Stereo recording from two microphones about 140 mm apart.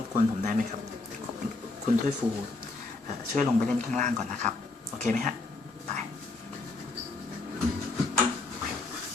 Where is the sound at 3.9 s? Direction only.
60° right (ahead or behind).